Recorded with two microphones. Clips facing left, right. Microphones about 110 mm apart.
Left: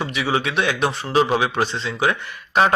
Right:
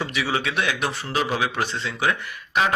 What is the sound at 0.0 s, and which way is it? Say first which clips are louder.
Speech: left 3 dB; 20° left (ahead or behind).